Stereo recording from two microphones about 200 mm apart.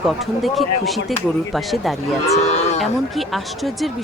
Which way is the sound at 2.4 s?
35° left (ahead or behind).